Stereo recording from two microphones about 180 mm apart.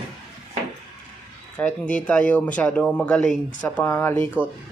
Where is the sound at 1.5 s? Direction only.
5° left (ahead or behind).